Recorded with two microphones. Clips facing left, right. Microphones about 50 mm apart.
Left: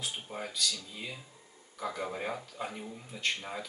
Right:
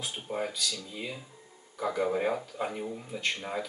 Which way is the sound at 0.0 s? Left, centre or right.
Centre.